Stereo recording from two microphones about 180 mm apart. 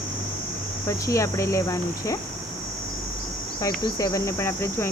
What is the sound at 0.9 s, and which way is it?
Speech, 15° left (ahead or behind).